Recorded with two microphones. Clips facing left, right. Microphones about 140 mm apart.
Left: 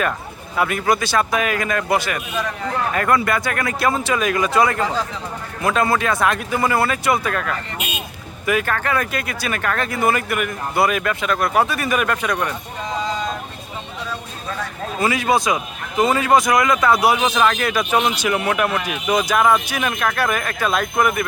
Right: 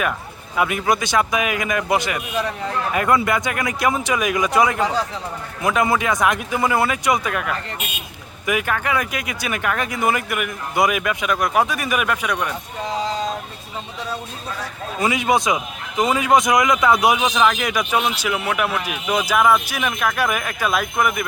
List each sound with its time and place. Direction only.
0.5 s speech: 15° right (ahead or behind)
15.0 s a man's voice: 20° right (ahead or behind)